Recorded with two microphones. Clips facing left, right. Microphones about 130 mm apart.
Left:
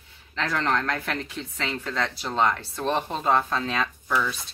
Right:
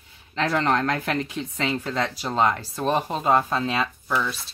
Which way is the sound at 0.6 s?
15° right (ahead or behind).